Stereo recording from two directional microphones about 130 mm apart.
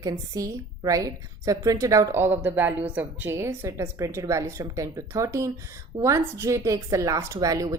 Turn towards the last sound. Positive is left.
turn(degrees=-25)  # may be behind; listen again after turning